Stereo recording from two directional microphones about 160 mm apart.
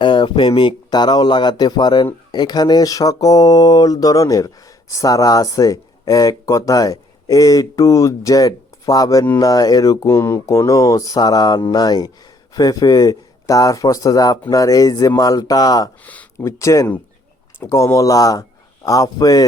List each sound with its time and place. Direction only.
0.0 s speech: 30° left (ahead or behind)
2.3 s mantra: 25° left (ahead or behind)
16.0 s speech: 15° left (ahead or behind)
17.6 s mantra: 15° left (ahead or behind)